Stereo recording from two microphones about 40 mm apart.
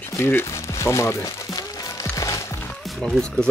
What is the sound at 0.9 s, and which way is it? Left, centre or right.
Speech, left.